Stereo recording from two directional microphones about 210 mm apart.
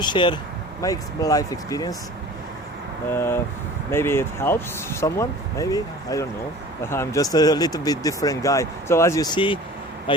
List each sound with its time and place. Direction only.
0.0 s speech: 20° left (ahead or behind)
3.1 s speech: 10° left (ahead or behind)